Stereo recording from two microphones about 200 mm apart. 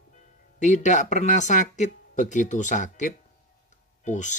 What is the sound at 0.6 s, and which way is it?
Speech, 35° left (ahead or behind).